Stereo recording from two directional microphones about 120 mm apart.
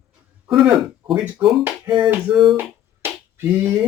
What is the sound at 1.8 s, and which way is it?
Music, 45° right (ahead or behind).